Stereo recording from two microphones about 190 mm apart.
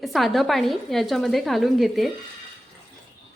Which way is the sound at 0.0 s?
Centre (ahead or behind).